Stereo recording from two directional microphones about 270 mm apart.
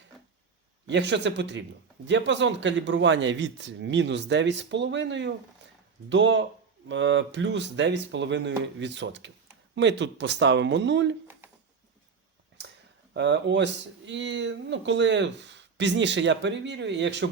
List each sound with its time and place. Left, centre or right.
0.9 s speech: right
13.1 s speech: right